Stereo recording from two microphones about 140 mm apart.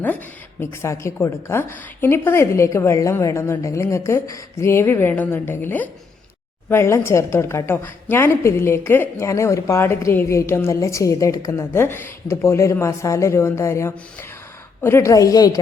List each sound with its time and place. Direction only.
0.6 s a woman's voice: 20° left (ahead or behind)